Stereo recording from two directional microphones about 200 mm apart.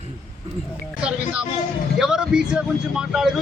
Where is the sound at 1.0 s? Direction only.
5° right (ahead or behind).